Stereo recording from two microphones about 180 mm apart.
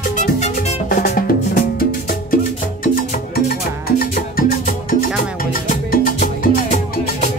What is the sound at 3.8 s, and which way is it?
Music, 60° left (ahead or behind).